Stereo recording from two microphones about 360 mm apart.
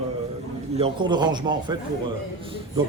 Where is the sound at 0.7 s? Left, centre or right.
Centre.